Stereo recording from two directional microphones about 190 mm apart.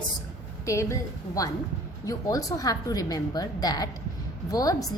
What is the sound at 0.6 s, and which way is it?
Speech, 15° left (ahead or behind).